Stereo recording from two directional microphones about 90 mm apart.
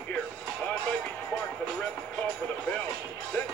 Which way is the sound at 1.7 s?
10° left (ahead or behind).